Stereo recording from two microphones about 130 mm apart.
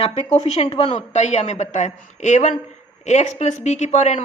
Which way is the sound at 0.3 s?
50° left (ahead or behind).